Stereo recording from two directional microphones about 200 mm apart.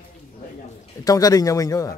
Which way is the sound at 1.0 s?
15° left (ahead or behind).